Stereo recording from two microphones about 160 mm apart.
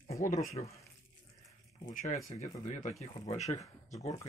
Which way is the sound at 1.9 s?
50° left (ahead or behind).